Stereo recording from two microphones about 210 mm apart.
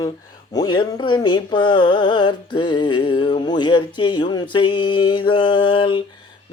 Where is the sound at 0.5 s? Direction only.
20° left (ahead or behind).